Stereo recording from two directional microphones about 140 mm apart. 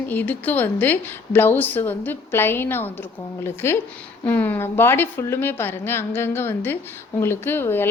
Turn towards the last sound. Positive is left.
turn(degrees=15)  # may be behind; listen again after turning